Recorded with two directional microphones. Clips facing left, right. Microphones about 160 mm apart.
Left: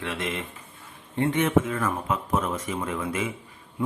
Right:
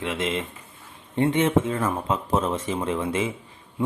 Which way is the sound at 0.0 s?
20° right (ahead or behind).